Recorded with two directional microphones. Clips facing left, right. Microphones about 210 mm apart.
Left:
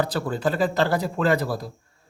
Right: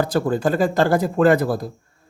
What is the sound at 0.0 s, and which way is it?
Speech, 45° right (ahead or behind).